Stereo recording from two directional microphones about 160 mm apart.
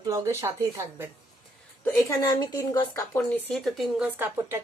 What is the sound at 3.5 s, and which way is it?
Speech, centre (ahead or behind).